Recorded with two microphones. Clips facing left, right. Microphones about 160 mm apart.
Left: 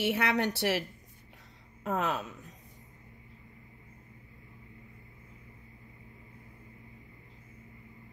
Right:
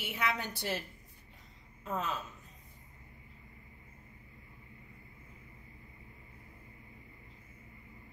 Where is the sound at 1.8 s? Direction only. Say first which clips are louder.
Left 5 dB; 65° left (ahead or behind).